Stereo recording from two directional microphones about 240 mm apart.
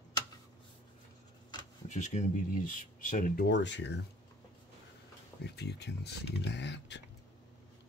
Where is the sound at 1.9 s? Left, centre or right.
Left.